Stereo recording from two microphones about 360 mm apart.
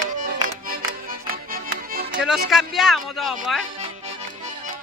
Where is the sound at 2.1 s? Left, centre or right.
Centre.